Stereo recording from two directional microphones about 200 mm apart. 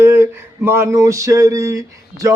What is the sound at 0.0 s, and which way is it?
Speech, 15° right (ahead or behind).